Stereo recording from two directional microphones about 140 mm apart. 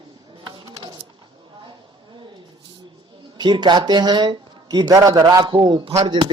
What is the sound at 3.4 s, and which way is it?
Speech, 30° right (ahead or behind).